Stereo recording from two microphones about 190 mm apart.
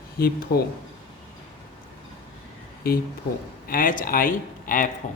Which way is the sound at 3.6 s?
45° left (ahead or behind).